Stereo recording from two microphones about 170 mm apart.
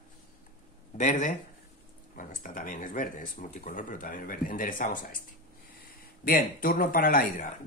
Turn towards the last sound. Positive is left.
turn(degrees=55)  # may be behind; listen again after turning